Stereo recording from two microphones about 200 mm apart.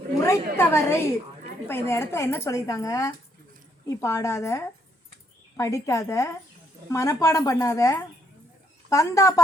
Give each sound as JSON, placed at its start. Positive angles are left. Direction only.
{"t": 0.5, "sound": "a woman's voice", "side_deg": 10}